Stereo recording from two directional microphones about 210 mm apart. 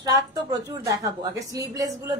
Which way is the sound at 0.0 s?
20° right (ahead or behind).